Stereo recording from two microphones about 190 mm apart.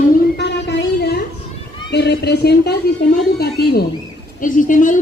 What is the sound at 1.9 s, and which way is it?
Speech, 60° left (ahead or behind).